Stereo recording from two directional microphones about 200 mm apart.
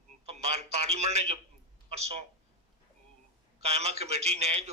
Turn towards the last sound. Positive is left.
turn(degrees=-30)  # may be behind; listen again after turning